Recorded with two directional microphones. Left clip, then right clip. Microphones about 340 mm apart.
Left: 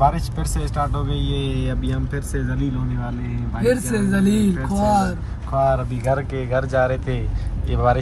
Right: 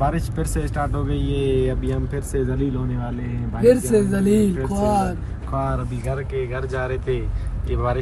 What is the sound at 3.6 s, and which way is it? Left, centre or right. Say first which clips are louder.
Speech: right 5 dB; right.